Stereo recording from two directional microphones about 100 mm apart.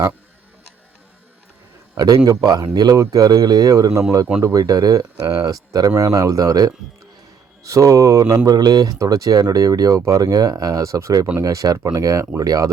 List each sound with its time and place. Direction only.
2.0 s speech: 40° right (ahead or behind)